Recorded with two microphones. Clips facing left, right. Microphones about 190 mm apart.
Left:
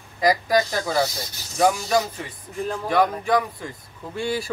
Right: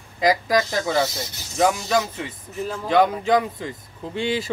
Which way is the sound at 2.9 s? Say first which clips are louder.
Right 3 dB; 25° right (ahead or behind).